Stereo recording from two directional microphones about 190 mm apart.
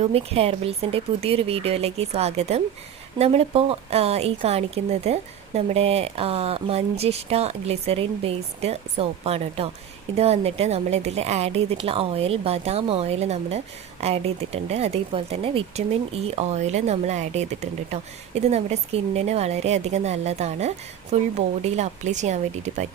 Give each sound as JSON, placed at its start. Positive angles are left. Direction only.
{"t": 0.0, "sound": "speech", "side_deg": -30}